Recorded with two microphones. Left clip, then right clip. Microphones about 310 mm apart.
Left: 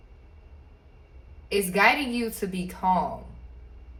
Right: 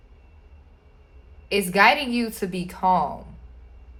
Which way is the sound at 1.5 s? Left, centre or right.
Right.